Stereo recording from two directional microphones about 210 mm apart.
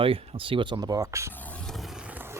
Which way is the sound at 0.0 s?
25° right (ahead or behind).